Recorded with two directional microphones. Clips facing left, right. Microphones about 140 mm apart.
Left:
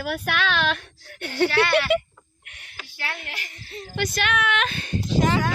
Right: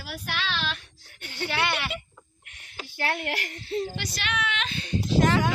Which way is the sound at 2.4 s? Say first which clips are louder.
Left 3 dB; 75° left (ahead or behind).